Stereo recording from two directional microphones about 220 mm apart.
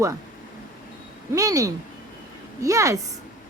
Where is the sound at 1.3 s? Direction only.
15° right (ahead or behind).